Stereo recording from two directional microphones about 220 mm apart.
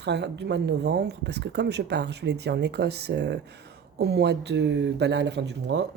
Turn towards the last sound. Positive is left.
turn(degrees=-55)  # may be behind; listen again after turning